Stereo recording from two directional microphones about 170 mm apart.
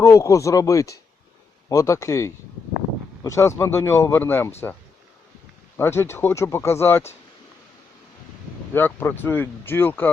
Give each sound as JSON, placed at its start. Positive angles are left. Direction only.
{"t": 0.0, "sound": "speech", "side_deg": 20}
{"t": 5.7, "sound": "speech", "side_deg": 15}
{"t": 8.7, "sound": "speech", "side_deg": 10}